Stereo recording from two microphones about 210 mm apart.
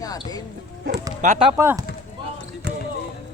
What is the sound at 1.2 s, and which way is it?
Speech, 30° right (ahead or behind).